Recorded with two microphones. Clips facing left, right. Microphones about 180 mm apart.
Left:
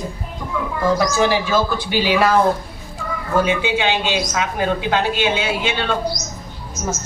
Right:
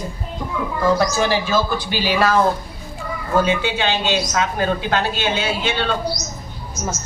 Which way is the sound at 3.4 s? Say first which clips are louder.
Left 3 dB; 15° left (ahead or behind).